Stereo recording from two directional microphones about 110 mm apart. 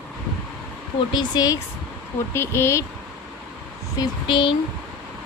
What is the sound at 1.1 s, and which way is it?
Speech, 40° left (ahead or behind).